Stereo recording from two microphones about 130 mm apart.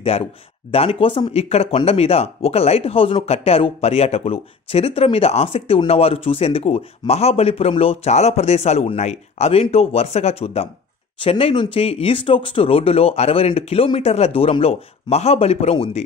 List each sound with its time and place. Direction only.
0.1 s speech: 50° left (ahead or behind)